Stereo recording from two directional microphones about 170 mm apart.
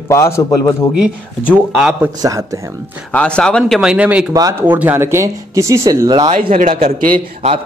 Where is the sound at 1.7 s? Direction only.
5° right (ahead or behind).